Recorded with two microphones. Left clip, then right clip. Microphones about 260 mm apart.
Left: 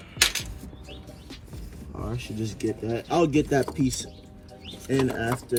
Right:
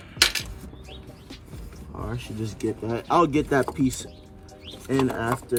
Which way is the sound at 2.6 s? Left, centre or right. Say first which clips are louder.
Right 2 dB; right.